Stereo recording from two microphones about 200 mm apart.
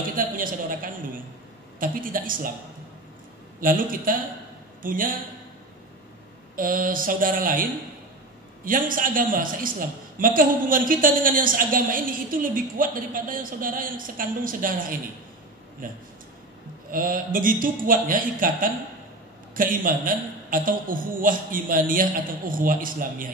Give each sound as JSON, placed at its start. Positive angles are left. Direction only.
{"t": 0.1, "sound": "a woman's voice", "side_deg": -45}
{"t": 3.6, "sound": "a woman's voice", "side_deg": -45}
{"t": 6.5, "sound": "a woman's voice", "side_deg": -45}
{"t": 8.6, "sound": "a woman's voice", "side_deg": -45}